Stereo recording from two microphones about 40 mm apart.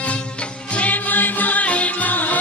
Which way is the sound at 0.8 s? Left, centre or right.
Left.